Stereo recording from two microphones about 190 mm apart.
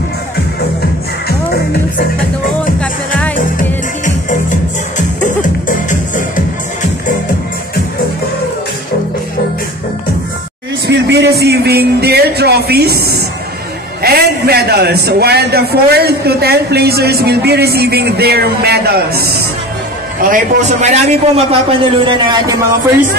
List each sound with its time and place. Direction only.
4.0 s music: 40° left (ahead or behind)
10.9 s a man's voice: 60° right (ahead or behind)
20.8 s a man's voice: 35° right (ahead or behind)